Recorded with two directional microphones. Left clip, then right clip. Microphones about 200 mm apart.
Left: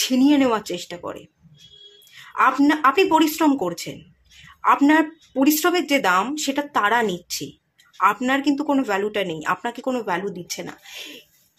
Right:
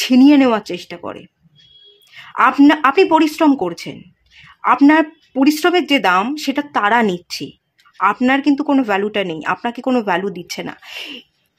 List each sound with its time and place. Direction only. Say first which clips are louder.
0.0 s speech: right 7 dB; 30° right (ahead or behind)